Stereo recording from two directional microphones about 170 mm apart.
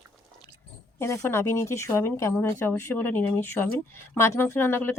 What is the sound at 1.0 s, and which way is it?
Speech, 15° left (ahead or behind).